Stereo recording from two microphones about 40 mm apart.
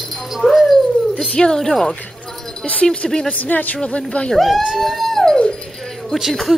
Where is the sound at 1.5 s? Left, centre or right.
Centre.